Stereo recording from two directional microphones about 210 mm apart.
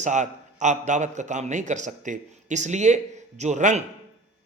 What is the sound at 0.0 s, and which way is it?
A man's voice, 35° right (ahead or behind).